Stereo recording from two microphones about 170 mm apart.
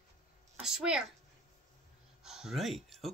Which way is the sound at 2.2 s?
5° right (ahead or behind).